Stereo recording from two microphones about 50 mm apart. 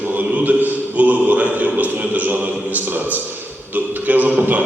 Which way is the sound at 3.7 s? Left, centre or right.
Right.